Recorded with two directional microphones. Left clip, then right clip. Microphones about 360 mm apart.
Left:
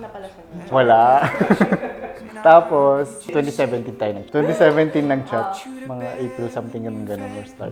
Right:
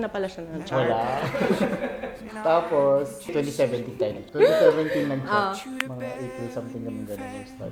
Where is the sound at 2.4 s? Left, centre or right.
Left.